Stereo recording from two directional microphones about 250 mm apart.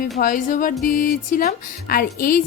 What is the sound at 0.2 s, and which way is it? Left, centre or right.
Music, left.